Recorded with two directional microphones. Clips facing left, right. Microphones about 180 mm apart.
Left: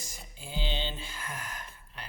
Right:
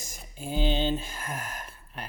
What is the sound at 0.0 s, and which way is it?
Speech, 45° right (ahead or behind).